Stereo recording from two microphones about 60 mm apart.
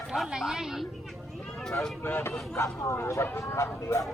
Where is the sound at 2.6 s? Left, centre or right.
Left.